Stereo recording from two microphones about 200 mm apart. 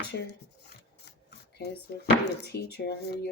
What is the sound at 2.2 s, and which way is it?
Speech, 55° left (ahead or behind).